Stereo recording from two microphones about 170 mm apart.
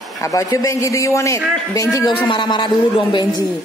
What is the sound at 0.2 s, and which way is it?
A woman's voice, 20° left (ahead or behind).